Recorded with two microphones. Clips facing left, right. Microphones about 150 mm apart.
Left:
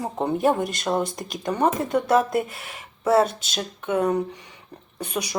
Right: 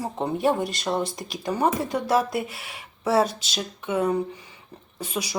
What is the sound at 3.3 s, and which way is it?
Speech, 50° left (ahead or behind).